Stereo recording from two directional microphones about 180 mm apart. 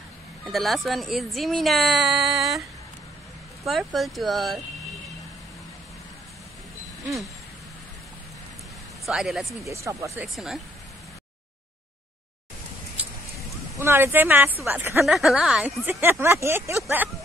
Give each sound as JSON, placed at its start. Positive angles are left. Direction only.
{"t": 0.5, "sound": "speech", "side_deg": 0}
{"t": 3.6, "sound": "speech", "side_deg": 0}
{"t": 9.0, "sound": "speech", "side_deg": 0}
{"t": 9.7, "sound": "speech", "side_deg": -15}
{"t": 10.2, "sound": "speech", "side_deg": 0}
{"t": 13.7, "sound": "speech", "side_deg": -15}